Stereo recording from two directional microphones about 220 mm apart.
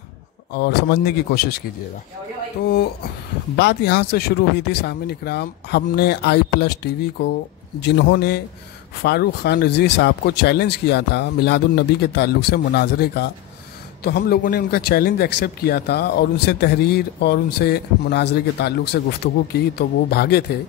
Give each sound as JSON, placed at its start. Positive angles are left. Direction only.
{"t": 0.5, "sound": "speech", "side_deg": 45}
{"t": 2.6, "sound": "speech", "side_deg": 50}